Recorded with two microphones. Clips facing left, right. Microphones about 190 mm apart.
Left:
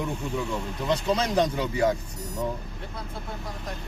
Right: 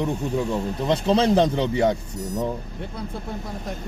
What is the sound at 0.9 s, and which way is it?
Speech, 25° right (ahead or behind).